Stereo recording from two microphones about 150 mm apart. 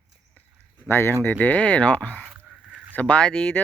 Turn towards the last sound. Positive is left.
turn(degrees=10)  # may be behind; listen again after turning